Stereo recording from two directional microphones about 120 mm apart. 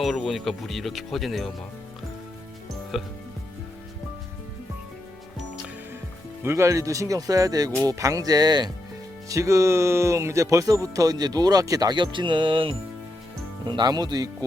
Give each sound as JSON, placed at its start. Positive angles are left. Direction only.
{"t": 0.0, "sound": "speech", "side_deg": 0}
{"t": 2.9, "sound": "speech", "side_deg": 0}
{"t": 6.4, "sound": "speech", "side_deg": -20}